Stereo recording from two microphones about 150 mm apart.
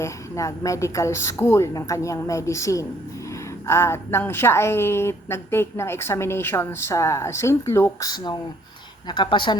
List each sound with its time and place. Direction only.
0.0 s a woman's voice: 20° left (ahead or behind)